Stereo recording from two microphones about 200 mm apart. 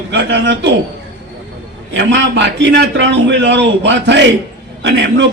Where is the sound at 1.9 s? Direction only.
65° right (ahead or behind).